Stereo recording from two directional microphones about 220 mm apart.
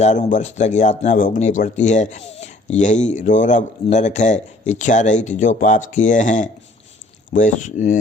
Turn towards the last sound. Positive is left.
turn(degrees=35)  # may be behind; listen again after turning